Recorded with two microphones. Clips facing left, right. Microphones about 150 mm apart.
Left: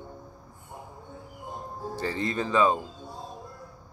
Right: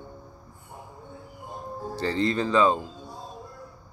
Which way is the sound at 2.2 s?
20° left (ahead or behind).